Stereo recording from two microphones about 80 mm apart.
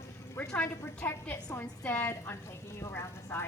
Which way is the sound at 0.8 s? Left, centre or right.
Left.